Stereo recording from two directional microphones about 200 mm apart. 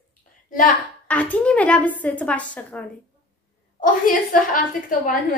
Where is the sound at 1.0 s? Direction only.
5° left (ahead or behind).